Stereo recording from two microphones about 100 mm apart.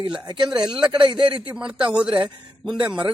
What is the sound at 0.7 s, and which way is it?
Speech, 5° right (ahead or behind).